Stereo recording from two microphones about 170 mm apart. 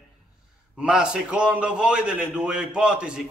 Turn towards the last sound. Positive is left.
turn(degrees=-5)  # may be behind; listen again after turning